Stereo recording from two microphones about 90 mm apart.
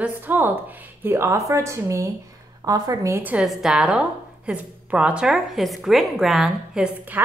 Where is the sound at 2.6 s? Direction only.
45° right (ahead or behind).